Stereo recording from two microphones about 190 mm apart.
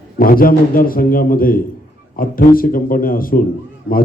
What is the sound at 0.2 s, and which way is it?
A man's voice, 50° left (ahead or behind).